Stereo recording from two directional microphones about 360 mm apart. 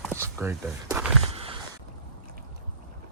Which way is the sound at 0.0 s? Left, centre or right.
Centre.